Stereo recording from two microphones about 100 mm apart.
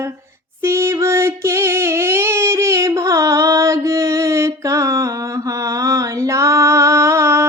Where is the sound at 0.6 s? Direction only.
25° right (ahead or behind).